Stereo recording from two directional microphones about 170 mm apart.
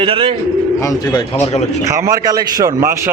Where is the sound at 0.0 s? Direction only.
30° right (ahead or behind).